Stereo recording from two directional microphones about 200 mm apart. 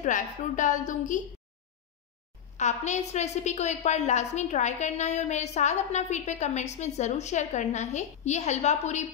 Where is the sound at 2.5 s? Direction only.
35° left (ahead or behind).